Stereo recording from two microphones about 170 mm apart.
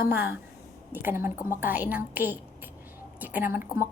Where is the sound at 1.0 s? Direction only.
15° right (ahead or behind).